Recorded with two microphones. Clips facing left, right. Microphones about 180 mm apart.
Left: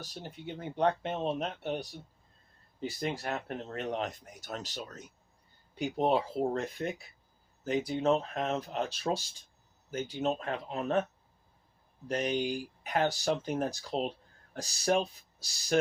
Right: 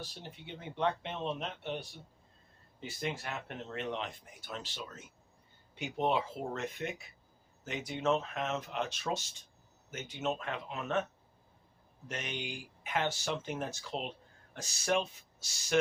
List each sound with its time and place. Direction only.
0.0 s speech: 40° left (ahead or behind)
12.0 s speech: 35° left (ahead or behind)